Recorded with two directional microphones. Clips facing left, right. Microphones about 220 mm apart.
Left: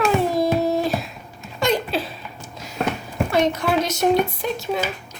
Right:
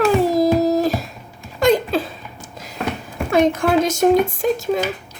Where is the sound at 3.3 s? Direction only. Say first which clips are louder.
Right 5 dB; 50° right (ahead or behind).